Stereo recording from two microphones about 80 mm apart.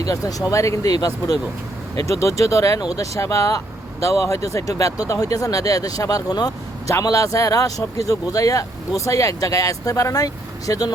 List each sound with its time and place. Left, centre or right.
0.0 s speech: left